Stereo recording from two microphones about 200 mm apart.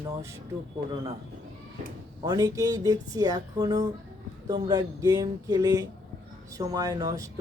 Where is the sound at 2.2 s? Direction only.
15° right (ahead or behind).